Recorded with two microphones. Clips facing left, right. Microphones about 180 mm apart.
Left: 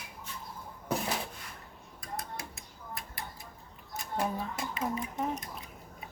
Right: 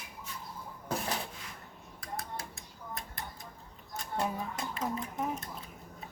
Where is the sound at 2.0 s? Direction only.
20° left (ahead or behind).